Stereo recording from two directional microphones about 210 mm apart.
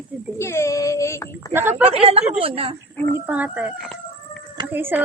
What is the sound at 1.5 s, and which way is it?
Speech, 10° right (ahead or behind).